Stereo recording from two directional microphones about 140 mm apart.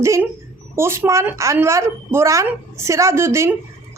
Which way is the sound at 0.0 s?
20° right (ahead or behind).